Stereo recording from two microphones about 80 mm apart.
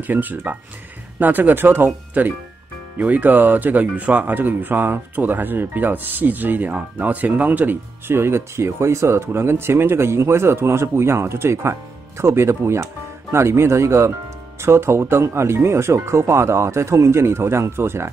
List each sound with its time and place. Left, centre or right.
0.0 s speech: right